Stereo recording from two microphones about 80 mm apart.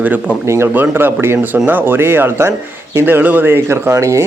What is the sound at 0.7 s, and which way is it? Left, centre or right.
A man's voice, right.